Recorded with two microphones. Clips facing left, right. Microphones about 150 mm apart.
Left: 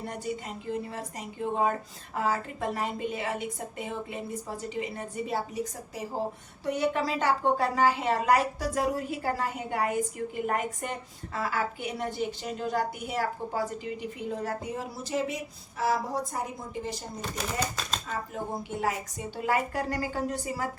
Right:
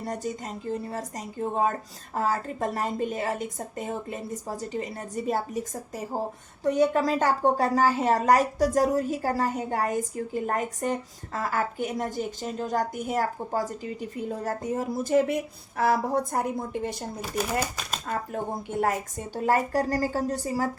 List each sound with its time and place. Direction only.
0.0 s a woman's voice: 40° right (ahead or behind); by 17.0 s 60° right (ahead or behind)
18.7 s a woman's voice: 50° right (ahead or behind)
19.4 s a woman's voice: 40° right (ahead or behind)